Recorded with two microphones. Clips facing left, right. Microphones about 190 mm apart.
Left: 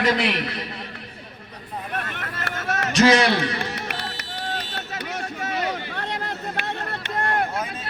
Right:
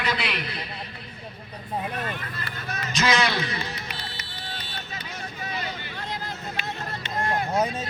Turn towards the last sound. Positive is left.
turn(degrees=70)  # may be behind; listen again after turning